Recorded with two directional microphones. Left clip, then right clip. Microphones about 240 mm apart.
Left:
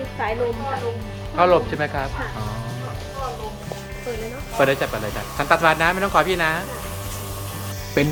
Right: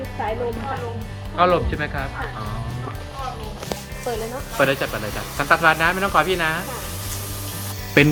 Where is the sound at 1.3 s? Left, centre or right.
Centre.